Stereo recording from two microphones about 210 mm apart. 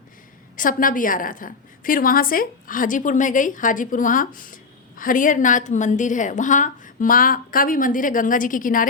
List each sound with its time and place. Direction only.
0.5 s a woman's voice: 40° left (ahead or behind)